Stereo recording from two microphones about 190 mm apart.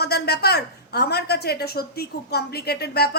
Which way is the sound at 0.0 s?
55° left (ahead or behind).